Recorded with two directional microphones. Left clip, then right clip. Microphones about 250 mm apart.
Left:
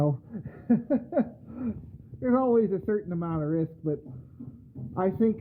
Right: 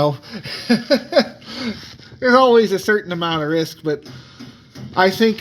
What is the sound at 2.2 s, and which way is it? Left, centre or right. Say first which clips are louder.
A man's voice: right 12 dB; centre.